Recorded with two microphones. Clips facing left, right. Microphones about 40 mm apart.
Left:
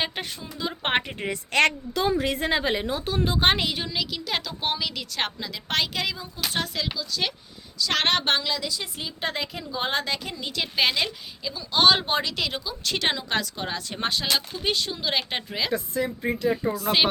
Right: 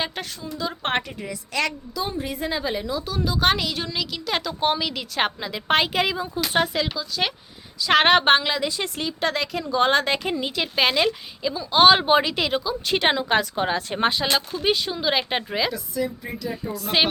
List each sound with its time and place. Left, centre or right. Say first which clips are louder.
0.0 s a woman's voice: right 1 dB; centre
1.2 s a woman's voice: left 4 dB; left
2.0 s a woman's voice: left 4 dB; left
2.3 s a woman's voice: left 2 dB; left
3.8 s a woman's voice: right 1 dB; centre; by 6.7 s right
6.9 s a woman's voice: right 3 dB; centre
7.8 s a woman's voice: right 7 dB; right
9.2 s a woman's voice: right 5 dB; right
10.1 s a woman's voice: right 7 dB; right
10.5 s a woman's voice: right 1 dB; centre
12.5 s a woman's voice: right 6 dB; centre
12.9 s a woman's voice: right 5 dB; right
15.7 s a woman's voice: left 1 dB; left
16.7 s speech: right 1 dB; centre